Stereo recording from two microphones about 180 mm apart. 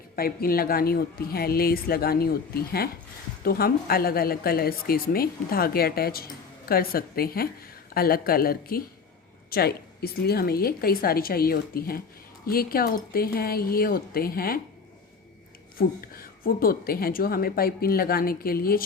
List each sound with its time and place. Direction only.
0.2 s a woman's voice: 55° left (ahead or behind)
15.8 s a woman's voice: 55° left (ahead or behind)